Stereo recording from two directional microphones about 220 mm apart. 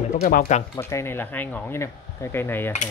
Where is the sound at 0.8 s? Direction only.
10° left (ahead or behind).